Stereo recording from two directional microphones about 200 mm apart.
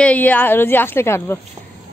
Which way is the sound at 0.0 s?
5° left (ahead or behind).